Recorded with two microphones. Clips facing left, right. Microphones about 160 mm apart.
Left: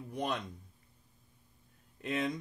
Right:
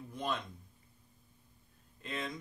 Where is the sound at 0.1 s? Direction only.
70° left (ahead or behind).